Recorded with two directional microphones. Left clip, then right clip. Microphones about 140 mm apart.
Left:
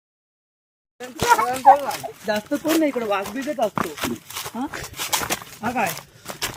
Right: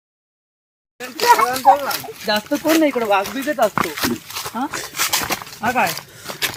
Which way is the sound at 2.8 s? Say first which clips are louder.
Right 5 dB; 30° right (ahead or behind).